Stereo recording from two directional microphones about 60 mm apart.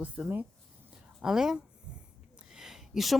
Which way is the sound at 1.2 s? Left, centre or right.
Centre.